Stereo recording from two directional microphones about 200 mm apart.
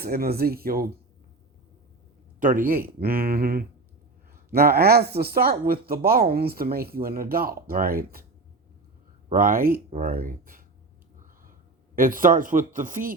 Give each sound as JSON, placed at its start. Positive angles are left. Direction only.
{"t": 0.0, "sound": "speech", "side_deg": -50}
{"t": 2.4, "sound": "speech", "side_deg": -40}
{"t": 9.3, "sound": "speech", "side_deg": -45}
{"t": 11.9, "sound": "speech", "side_deg": -45}